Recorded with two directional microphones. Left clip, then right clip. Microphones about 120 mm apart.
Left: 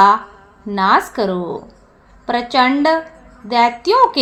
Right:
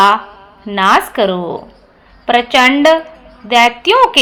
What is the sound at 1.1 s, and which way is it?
A woman's voice, 60° right (ahead or behind).